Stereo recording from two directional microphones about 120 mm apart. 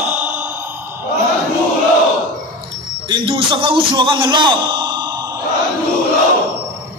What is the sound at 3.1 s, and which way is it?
A man's voice, 45° right (ahead or behind).